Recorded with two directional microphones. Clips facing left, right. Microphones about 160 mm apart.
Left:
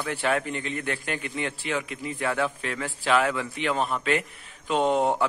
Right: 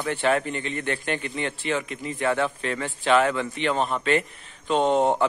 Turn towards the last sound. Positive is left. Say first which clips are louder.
# right 2 dB
turn(degrees=0)  # may be behind; listen again after turning